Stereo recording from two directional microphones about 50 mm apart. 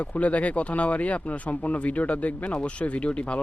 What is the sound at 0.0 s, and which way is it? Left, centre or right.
Speech, left.